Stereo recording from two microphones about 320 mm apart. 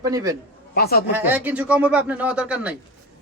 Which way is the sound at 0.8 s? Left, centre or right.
Left.